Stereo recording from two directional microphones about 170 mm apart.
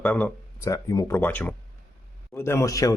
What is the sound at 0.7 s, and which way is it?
Speech, 20° left (ahead or behind).